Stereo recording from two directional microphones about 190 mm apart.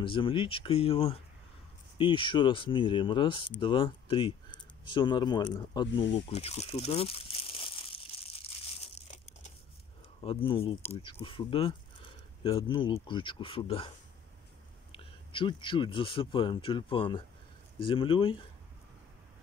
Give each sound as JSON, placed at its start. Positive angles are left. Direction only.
{"t": 0.0, "sound": "speech", "side_deg": 25}
{"t": 6.2, "sound": "crumpling", "side_deg": 30}
{"t": 10.2, "sound": "speech", "side_deg": 30}